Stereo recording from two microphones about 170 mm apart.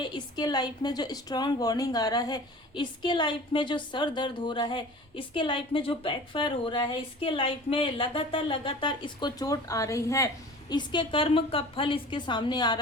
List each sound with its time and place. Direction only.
0.0 s speech: 25° left (ahead or behind)